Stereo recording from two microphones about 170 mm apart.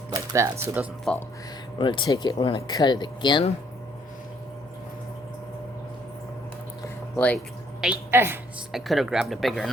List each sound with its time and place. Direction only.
0.1 s music: 20° right (ahead or behind)
1.1 s speech: 5° left (ahead or behind)
1.8 s speech: 25° left (ahead or behind)
6.8 s a sound: 10° left (ahead or behind)
7.8 s a woman's voice: 10° right (ahead or behind)
8.7 s speech: centre (ahead or behind)